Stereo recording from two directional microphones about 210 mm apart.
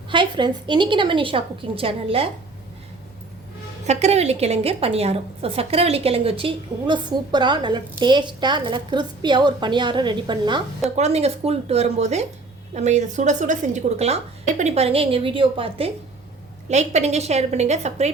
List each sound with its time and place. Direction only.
0.1 s a woman's voice: 20° right (ahead or behind)
3.8 s a woman's voice: 30° right (ahead or behind)